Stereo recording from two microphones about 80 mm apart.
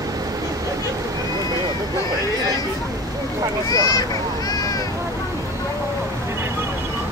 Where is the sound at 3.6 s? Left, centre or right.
Left.